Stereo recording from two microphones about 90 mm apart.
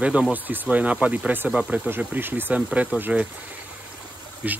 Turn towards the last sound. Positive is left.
turn(degrees=-15)  # may be behind; listen again after turning